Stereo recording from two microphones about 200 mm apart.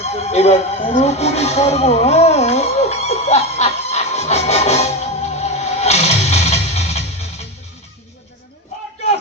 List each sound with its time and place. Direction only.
0.2 s speech: 30° left (ahead or behind)
5.3 s music: 30° left (ahead or behind)